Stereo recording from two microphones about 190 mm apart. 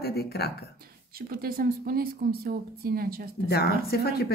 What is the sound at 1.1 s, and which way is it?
Speech, 50° right (ahead or behind).